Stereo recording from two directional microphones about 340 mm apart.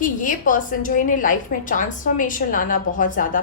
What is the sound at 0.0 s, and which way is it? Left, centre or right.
A woman's voice, left.